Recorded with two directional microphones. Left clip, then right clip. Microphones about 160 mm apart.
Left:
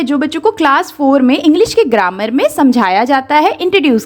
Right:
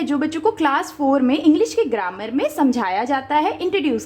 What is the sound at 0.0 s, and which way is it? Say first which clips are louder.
A woman's voice: left 7 dB; 25° left (ahead or behind).